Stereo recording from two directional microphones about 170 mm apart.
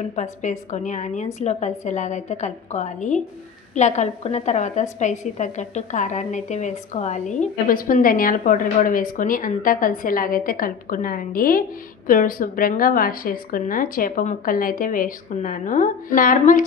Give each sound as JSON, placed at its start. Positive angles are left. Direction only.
{"t": 0.1, "sound": "a woman's voice", "side_deg": 45}